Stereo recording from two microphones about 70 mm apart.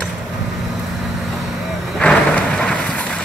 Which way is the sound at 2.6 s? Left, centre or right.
Centre.